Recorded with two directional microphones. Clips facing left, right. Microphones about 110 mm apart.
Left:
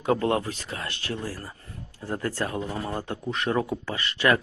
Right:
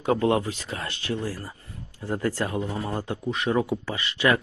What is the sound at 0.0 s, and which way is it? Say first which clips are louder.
Speech: right 2 dB; 20° right (ahead or behind).